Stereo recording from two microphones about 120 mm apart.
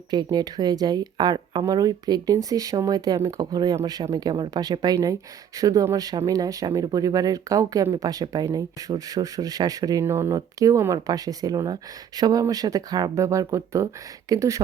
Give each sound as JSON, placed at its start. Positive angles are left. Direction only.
{"t": 0.1, "sound": "speech", "side_deg": -35}